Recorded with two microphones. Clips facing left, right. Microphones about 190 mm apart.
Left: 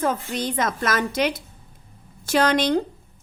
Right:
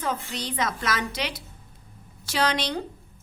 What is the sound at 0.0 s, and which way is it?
A woman's voice, 50° left (ahead or behind).